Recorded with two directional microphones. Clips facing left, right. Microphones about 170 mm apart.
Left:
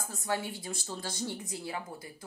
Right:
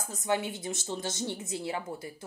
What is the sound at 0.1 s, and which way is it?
A woman's voice, 20° right (ahead or behind).